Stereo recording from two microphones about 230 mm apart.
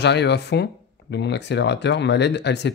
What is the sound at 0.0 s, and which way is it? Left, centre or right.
Speech, left.